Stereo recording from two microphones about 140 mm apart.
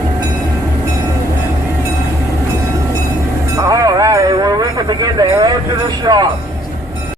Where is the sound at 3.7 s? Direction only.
25° right (ahead or behind).